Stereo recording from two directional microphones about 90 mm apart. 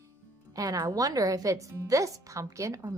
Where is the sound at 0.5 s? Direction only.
40° right (ahead or behind).